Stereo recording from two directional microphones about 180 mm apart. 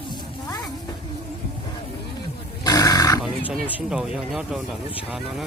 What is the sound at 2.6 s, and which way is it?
Roaring cats, 20° left (ahead or behind).